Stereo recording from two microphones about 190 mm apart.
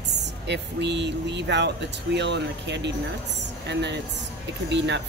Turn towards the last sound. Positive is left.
turn(degrees=-65)  # may be behind; listen again after turning